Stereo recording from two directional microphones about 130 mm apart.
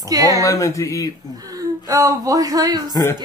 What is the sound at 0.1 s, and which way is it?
Speech, 25° right (ahead or behind).